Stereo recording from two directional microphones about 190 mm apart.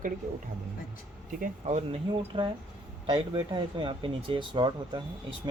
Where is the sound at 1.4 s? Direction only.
35° right (ahead or behind).